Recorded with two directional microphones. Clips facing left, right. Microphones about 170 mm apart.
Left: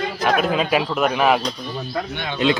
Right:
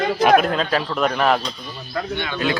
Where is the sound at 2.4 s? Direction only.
25° left (ahead or behind).